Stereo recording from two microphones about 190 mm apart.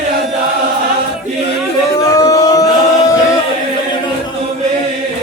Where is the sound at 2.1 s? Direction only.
20° left (ahead or behind).